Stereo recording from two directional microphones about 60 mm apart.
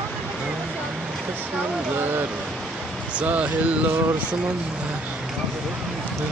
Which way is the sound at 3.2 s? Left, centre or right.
Right.